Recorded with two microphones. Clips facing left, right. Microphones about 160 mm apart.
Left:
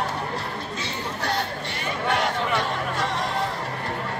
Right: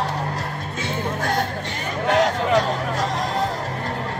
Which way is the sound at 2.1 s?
40° right (ahead or behind).